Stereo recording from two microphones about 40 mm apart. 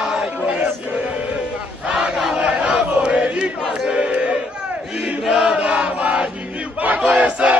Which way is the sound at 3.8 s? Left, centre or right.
Right.